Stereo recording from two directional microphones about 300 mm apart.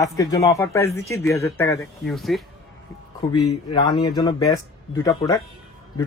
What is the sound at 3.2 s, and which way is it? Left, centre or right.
Speech, centre.